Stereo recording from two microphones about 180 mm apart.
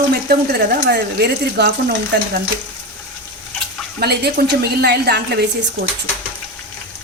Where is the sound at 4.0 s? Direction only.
65° right (ahead or behind).